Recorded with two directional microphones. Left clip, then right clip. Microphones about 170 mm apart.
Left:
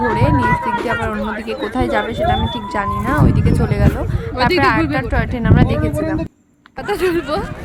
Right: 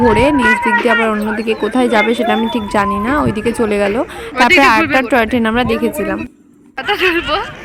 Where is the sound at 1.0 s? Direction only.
25° right (ahead or behind).